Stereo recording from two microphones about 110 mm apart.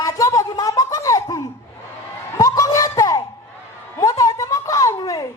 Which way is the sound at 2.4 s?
30° left (ahead or behind).